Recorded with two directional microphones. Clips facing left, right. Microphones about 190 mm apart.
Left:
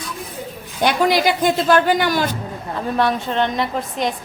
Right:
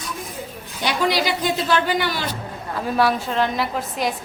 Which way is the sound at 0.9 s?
50° left (ahead or behind).